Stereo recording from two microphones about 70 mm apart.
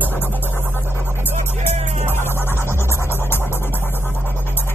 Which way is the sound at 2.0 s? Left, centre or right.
Left.